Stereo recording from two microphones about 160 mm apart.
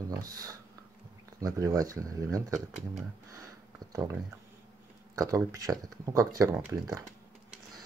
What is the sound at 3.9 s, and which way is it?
Speech, 20° right (ahead or behind).